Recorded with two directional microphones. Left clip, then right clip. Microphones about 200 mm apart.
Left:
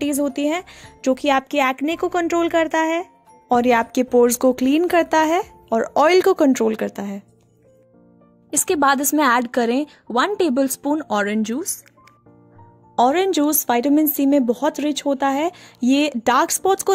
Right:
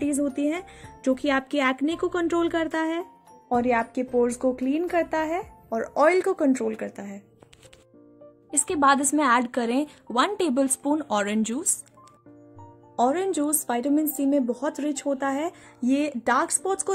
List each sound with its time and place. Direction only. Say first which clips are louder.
0.0 s a woman's voice: left 5 dB; 45° left (ahead or behind)
3.4 s speech: left 7 dB; 50° left (ahead or behind)
6.9 s speech: left 8 dB; 70° left (ahead or behind)
8.6 s a woman's voice: left 3 dB; 40° left (ahead or behind)
12.9 s a woman's voice: left 7 dB; 40° left (ahead or behind)